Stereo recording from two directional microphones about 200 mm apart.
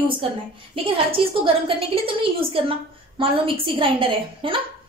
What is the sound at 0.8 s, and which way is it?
A woman's voice, 25° right (ahead or behind).